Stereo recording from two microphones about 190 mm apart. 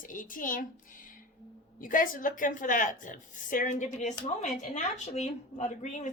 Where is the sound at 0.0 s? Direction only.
45° left (ahead or behind).